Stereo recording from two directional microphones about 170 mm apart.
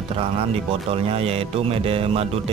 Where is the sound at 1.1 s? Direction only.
35° right (ahead or behind).